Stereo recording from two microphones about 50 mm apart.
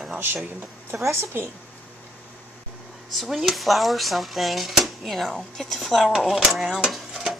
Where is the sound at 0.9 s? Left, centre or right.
Right.